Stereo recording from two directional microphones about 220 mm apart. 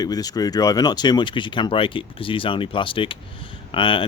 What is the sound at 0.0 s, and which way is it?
Speech, 15° left (ahead or behind).